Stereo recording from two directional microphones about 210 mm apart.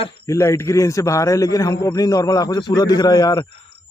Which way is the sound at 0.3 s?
15° left (ahead or behind).